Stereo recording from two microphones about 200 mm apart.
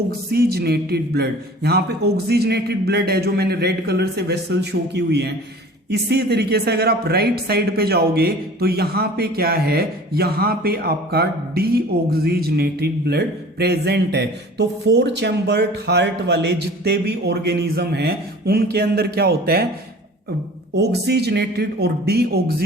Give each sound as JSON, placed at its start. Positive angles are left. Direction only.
{"t": 0.3, "sound": "speech", "side_deg": -50}
{"t": 20.7, "sound": "speech", "side_deg": -55}